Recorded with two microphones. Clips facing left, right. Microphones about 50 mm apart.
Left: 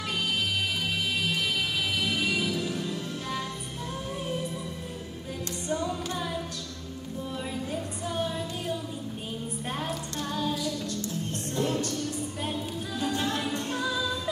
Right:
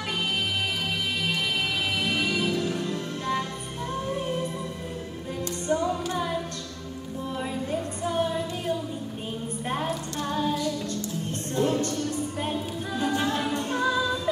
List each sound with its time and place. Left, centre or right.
2.0 s music: centre
5.7 s music: centre
6.0 s singing: centre
7.7 s music: centre
10.2 s music: centre
12.4 s a capella: centre